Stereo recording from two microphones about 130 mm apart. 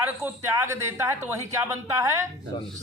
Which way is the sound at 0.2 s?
20° right (ahead or behind).